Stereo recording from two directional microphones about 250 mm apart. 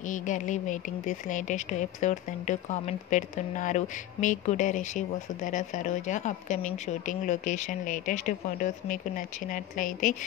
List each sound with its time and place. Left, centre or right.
0.0 s speech: left